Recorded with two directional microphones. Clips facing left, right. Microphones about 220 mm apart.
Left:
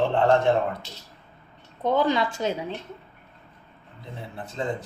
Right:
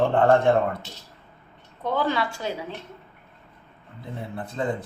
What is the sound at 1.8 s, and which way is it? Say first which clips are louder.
Speech: left 3 dB; 20° left (ahead or behind).